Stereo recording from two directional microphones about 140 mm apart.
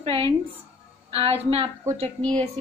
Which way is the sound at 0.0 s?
40° right (ahead or behind).